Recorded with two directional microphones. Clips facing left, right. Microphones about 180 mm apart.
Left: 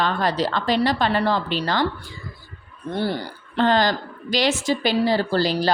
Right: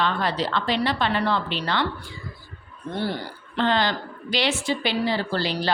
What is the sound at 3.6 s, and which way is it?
A woman's voice, 45° left (ahead or behind).